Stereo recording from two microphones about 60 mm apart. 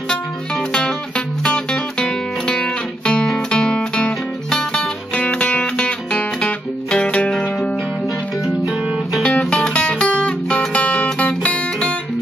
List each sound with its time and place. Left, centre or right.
0.7 s music: centre
9.3 s music: centre